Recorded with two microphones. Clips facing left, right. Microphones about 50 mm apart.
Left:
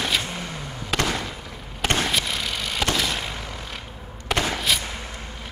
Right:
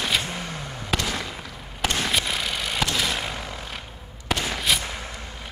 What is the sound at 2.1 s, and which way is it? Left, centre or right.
Vehicle, centre.